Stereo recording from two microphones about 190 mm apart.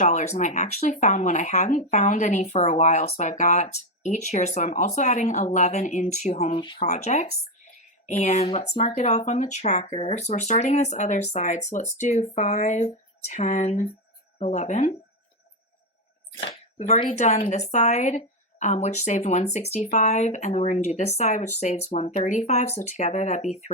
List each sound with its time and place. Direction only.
0.0 s speech: 40° left (ahead or behind)
6.8 s speech: 35° left (ahead or behind)
16.4 s speech: 30° left (ahead or behind)